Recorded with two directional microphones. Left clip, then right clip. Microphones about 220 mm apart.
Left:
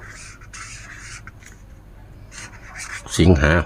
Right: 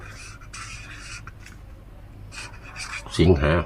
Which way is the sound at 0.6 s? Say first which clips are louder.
Left 2 dB; 5° left (ahead or behind).